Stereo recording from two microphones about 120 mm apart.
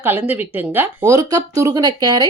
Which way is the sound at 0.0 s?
15° right (ahead or behind).